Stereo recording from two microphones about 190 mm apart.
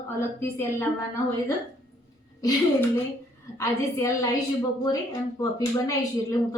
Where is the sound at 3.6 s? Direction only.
15° left (ahead or behind).